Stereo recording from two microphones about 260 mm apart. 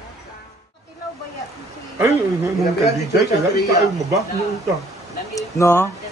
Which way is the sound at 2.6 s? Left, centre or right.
Left.